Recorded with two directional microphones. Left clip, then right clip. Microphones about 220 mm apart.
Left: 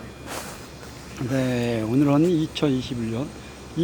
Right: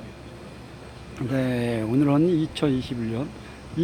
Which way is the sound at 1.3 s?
Centre (ahead or behind).